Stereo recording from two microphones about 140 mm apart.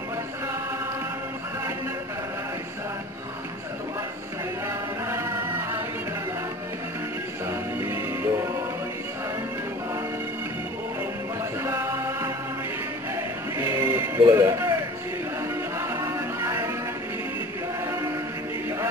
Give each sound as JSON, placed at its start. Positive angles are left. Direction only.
{"t": 7.4, "sound": "music", "side_deg": -15}
{"t": 11.6, "sound": "music", "side_deg": -20}
{"t": 13.6, "sound": "music", "side_deg": -20}
{"t": 15.8, "sound": "music", "side_deg": -20}